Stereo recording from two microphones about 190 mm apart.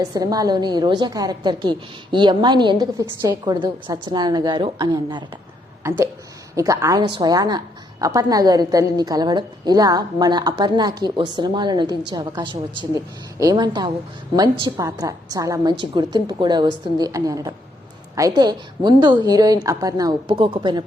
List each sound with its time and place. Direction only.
0.0 s a woman's voice: 20° right (ahead or behind)
6.6 s a woman's voice: 15° right (ahead or behind)